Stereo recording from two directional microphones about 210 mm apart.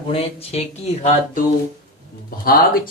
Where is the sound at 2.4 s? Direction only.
45° left (ahead or behind).